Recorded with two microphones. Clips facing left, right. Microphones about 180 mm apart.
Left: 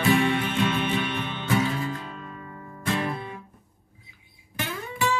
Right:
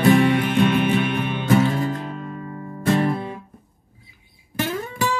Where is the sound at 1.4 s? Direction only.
45° right (ahead or behind).